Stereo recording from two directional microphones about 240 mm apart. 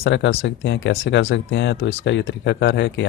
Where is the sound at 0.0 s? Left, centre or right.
Left.